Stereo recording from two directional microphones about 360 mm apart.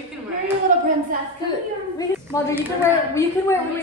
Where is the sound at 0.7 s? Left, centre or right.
Right.